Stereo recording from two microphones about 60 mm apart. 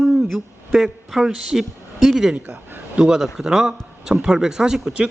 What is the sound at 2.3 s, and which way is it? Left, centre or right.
A man's voice, centre.